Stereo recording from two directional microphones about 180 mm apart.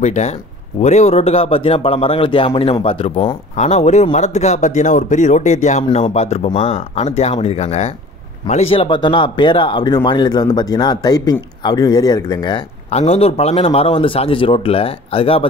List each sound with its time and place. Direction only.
0.0 s speech: 40° left (ahead or behind)